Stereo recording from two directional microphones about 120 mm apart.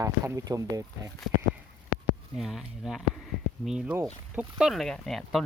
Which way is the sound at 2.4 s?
Centre (ahead or behind).